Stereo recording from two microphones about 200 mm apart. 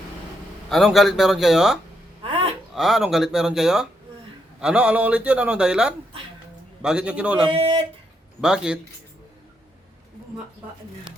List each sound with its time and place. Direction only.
0.7 s a man's voice: centre (ahead or behind)
2.2 s a sound: 30° right (ahead or behind)
2.7 s a man's voice: centre (ahead or behind)
7.5 s speech: 25° right (ahead or behind)
8.4 s a man's voice: 5° right (ahead or behind)